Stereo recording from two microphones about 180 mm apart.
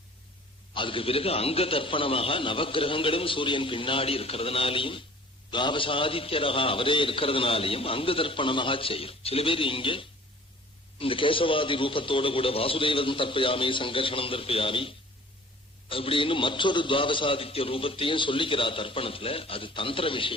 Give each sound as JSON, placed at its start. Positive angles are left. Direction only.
{"t": 0.7, "sound": "a man's voice", "side_deg": 30}